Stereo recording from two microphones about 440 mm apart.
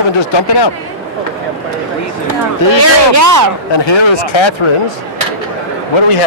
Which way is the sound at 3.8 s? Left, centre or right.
Left.